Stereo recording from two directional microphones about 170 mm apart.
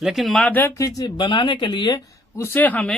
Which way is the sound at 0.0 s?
Centre (ahead or behind).